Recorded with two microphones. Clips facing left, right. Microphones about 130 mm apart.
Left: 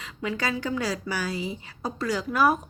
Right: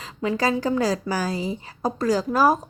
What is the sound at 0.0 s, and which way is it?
A woman's voice, 35° right (ahead or behind).